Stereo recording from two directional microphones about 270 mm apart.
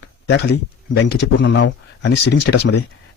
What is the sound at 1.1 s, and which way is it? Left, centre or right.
Speech, left.